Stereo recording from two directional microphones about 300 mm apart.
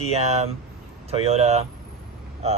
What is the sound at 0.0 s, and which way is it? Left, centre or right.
Speech, right.